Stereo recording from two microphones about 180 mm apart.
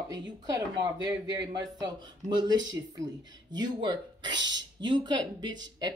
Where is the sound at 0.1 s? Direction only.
20° right (ahead or behind).